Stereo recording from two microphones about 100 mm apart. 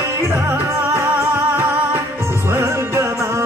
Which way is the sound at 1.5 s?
20° right (ahead or behind).